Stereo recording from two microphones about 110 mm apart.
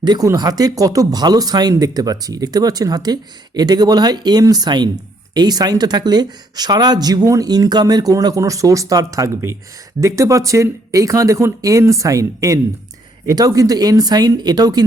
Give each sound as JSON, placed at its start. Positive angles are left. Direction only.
{"t": 0.0, "sound": "a woman's voice", "side_deg": -40}